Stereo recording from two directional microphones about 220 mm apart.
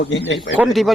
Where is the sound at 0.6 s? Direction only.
Centre (ahead or behind).